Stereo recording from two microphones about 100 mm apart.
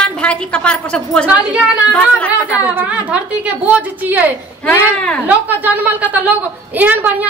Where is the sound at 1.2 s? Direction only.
15° right (ahead or behind).